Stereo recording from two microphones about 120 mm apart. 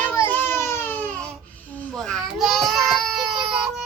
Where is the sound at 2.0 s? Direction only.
5° left (ahead or behind).